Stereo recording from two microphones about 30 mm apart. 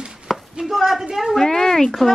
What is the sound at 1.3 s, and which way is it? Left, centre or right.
Speech, centre.